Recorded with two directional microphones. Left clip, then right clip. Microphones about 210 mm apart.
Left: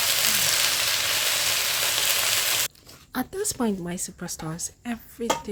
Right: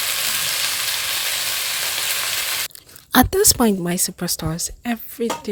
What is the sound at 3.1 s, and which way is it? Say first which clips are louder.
Speech: right 14 dB; 45° right (ahead or behind).